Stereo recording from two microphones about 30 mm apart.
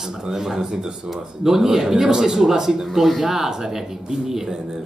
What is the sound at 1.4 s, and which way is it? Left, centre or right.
A man's voice, centre.